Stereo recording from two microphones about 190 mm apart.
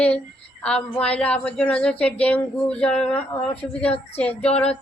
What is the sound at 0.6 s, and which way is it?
Speech, 5° left (ahead or behind).